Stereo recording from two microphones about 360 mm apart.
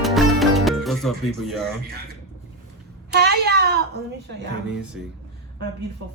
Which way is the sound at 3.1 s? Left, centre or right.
Right.